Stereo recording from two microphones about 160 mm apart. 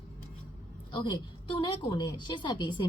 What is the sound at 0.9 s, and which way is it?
A woman's voice, 30° left (ahead or behind).